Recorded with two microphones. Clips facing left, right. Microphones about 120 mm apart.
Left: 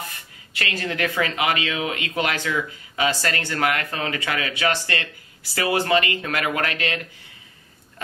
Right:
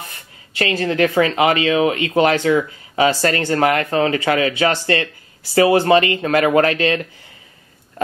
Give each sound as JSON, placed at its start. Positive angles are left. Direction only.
{"t": 0.6, "sound": "speech", "side_deg": -30}